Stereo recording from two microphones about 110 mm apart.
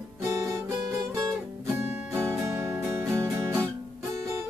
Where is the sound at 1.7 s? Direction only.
20° right (ahead or behind).